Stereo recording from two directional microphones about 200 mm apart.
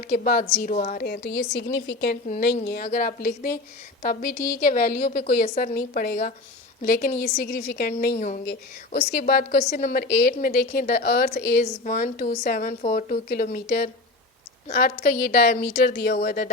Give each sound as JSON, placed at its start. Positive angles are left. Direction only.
{"t": 0.1, "sound": "a woman's voice", "side_deg": 45}
{"t": 9.1, "sound": "a woman's voice", "side_deg": 50}